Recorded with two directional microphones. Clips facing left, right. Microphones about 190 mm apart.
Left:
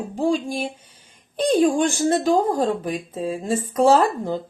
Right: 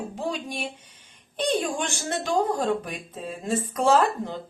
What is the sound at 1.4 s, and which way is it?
Speech, 35° left (ahead or behind).